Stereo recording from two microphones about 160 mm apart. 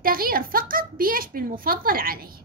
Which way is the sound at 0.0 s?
65° right (ahead or behind).